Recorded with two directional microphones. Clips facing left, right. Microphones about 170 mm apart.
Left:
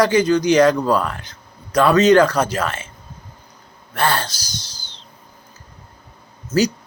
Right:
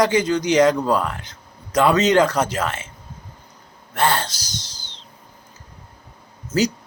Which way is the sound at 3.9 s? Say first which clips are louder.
Even; 20° right (ahead or behind).